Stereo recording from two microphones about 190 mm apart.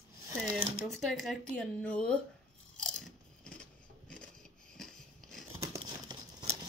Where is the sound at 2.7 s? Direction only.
5° left (ahead or behind).